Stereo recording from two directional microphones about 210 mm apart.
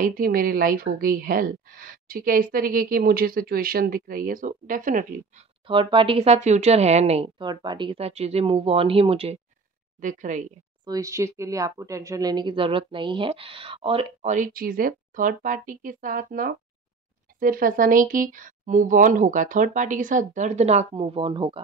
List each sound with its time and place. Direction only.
0.0 s a woman's voice: 40° right (ahead or behind)
5.7 s speech: 25° right (ahead or behind)
9.9 s speech: 35° right (ahead or behind)
10.9 s speech: 15° right (ahead or behind)